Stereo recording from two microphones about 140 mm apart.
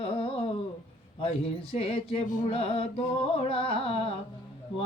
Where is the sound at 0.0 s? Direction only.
45° left (ahead or behind).